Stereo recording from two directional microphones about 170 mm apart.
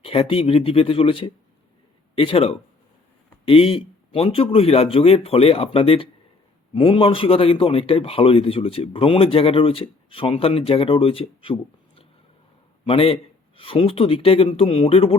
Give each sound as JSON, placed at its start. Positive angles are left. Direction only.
{"t": 0.0, "sound": "a man's voice", "side_deg": 35}